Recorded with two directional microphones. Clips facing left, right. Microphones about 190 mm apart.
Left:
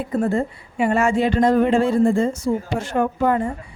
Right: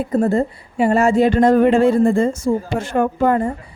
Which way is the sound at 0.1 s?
40° right (ahead or behind).